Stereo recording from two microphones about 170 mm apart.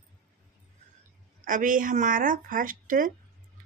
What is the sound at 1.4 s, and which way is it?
Speech, 55° right (ahead or behind).